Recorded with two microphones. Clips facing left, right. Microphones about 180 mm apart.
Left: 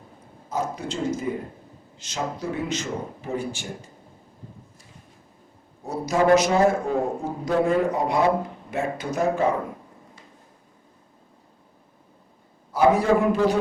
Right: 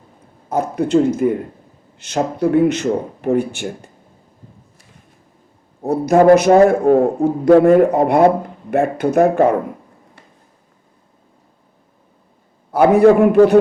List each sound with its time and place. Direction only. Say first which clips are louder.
0.5 s speech: right 13 dB; 60° right (ahead or behind)
5.8 s speech: right 10 dB; 60° right (ahead or behind)
12.7 s speech: right 8 dB; 60° right (ahead or behind)